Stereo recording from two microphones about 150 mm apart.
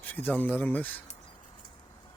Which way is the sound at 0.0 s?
10° left (ahead or behind).